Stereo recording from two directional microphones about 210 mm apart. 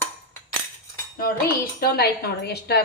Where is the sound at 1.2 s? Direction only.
45° left (ahead or behind).